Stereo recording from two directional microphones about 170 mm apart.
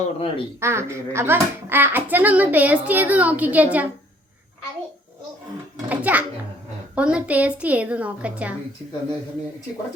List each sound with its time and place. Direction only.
0.0 s speech: 35° left (ahead or behind)
0.6 s a child's voice: 15° right (ahead or behind)
5.9 s a child's voice: 10° right (ahead or behind)